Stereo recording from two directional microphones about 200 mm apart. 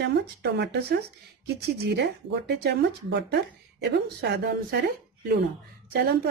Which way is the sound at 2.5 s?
55° right (ahead or behind).